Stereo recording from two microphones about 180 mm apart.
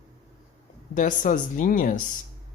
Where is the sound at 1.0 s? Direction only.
45° left (ahead or behind).